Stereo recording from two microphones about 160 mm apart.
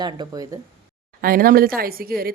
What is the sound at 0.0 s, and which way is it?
Speech, 25° right (ahead or behind).